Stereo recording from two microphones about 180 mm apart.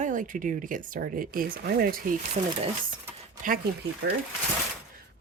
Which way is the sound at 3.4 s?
50° right (ahead or behind).